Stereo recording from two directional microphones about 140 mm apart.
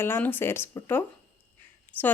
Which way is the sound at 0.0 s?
15° left (ahead or behind).